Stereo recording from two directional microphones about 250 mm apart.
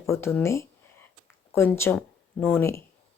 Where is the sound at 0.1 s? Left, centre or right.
Centre.